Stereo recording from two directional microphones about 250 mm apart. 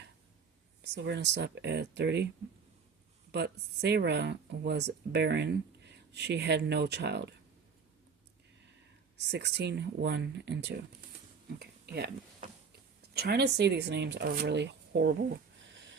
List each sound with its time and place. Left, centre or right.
0.8 s speech: right
3.3 s speech: right
9.3 s speech: right
13.0 s speech: right